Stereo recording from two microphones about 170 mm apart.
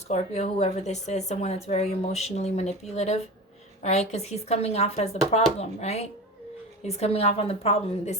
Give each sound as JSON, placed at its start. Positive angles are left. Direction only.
{"t": 0.1, "sound": "a woman's voice", "side_deg": 40}